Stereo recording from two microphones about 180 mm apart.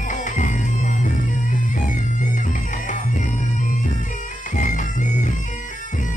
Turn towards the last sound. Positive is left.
turn(degrees=45)  # may be behind; listen again after turning